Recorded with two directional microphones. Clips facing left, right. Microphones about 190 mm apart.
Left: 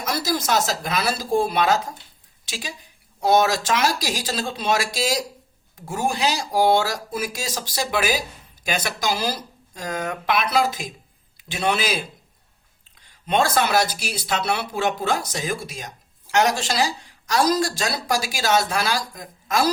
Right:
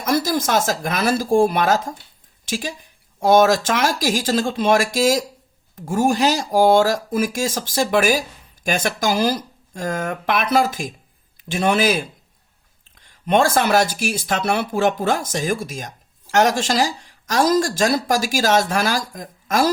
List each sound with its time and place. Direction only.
0.0 s speech: 50° right (ahead or behind)
13.2 s speech: 50° right (ahead or behind)